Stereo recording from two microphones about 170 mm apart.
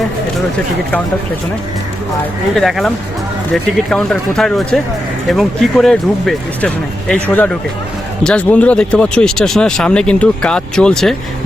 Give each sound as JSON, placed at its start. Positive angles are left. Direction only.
{"t": 2.6, "sound": "speech", "side_deg": 0}